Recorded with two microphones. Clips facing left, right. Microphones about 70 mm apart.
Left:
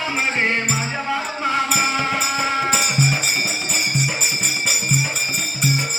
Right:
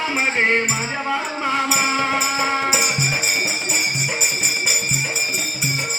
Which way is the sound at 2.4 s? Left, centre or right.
Right.